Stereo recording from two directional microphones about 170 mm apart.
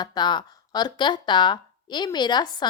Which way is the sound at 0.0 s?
25° left (ahead or behind).